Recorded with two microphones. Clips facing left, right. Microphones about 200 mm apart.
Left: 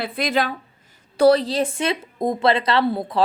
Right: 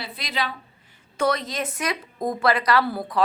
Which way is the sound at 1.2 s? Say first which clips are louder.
Left 9 dB; 30° left (ahead or behind).